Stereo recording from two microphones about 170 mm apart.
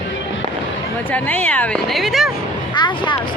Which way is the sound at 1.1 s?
10° left (ahead or behind).